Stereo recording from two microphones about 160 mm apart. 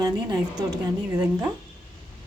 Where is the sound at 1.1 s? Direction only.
10° right (ahead or behind).